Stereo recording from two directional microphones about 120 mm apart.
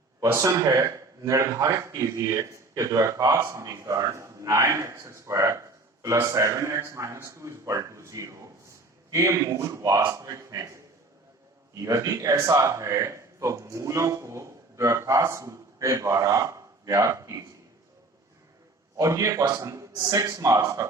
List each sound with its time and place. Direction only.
0.3 s a man's voice: 25° right (ahead or behind)
11.8 s a man's voice: 30° right (ahead or behind)
18.9 s a man's voice: 25° right (ahead or behind)